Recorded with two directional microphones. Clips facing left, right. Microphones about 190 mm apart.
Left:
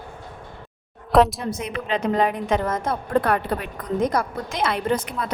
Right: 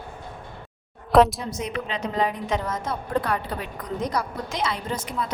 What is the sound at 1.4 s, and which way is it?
A woman's voice, 55° left (ahead or behind).